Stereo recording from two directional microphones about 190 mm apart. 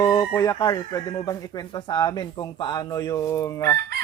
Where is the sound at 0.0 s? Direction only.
15° left (ahead or behind).